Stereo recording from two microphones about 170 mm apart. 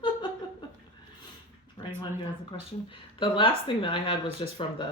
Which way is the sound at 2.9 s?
30° left (ahead or behind).